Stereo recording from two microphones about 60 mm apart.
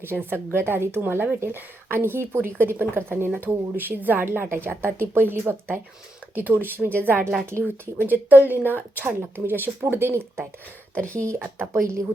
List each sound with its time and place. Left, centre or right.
0.0 s a woman's voice: right
3.2 s a woman's voice: right
10.9 s speech: left
11.3 s a woman's voice: right
11.7 s speech: right